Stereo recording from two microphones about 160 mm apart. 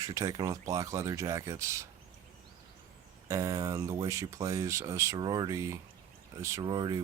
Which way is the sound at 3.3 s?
20° right (ahead or behind).